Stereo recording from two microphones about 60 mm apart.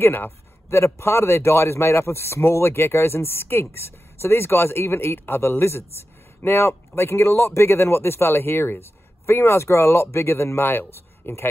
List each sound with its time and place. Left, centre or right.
0.0 s a man's voice: left